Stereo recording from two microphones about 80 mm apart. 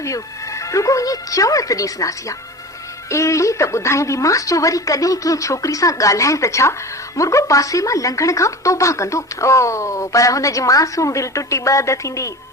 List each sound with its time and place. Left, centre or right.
0.0 s speech: left